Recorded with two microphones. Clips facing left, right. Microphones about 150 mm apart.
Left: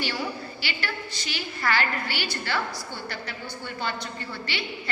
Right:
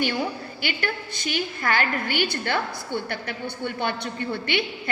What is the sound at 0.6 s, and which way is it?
A woman's voice, 50° right (ahead or behind).